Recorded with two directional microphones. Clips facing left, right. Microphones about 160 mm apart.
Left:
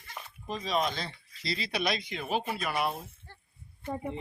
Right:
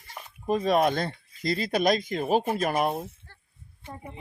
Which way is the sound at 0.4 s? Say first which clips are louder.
Right 8 dB; 55° right (ahead or behind).